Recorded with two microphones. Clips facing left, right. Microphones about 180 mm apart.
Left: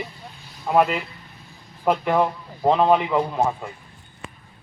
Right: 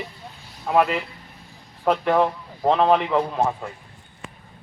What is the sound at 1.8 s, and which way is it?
A man's voice, 5° left (ahead or behind).